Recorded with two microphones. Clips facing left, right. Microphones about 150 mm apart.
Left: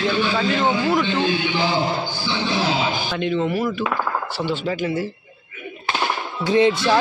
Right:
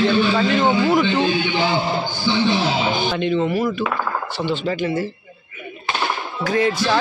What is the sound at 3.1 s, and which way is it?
Speech, centre (ahead or behind).